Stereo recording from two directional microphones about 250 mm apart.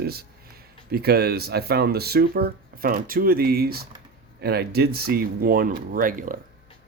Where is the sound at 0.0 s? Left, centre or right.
Right.